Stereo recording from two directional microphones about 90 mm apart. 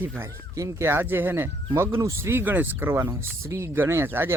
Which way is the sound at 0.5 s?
30° right (ahead or behind).